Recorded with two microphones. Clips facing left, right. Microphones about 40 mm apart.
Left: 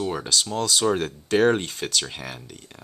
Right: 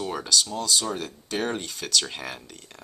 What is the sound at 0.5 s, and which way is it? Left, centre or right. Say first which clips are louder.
Speech: left 2 dB; left.